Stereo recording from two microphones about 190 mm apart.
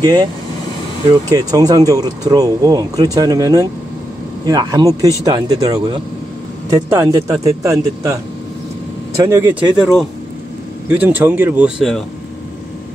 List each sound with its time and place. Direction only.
0.0 s speech: 20° right (ahead or behind); by 12.0 s 5° right (ahead or behind)